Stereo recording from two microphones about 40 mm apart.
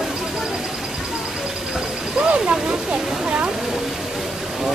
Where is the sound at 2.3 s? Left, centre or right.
Right.